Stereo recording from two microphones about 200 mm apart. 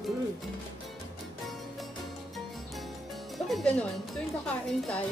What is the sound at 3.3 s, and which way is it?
Music, centre (ahead or behind).